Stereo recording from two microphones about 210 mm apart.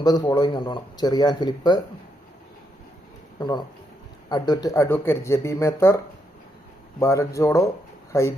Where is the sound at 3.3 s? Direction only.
20° left (ahead or behind).